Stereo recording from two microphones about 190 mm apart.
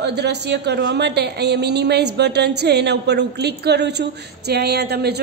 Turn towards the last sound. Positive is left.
turn(degrees=-55)  # may be behind; listen again after turning